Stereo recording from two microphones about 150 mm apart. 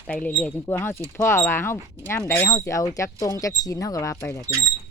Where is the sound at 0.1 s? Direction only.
10° left (ahead or behind).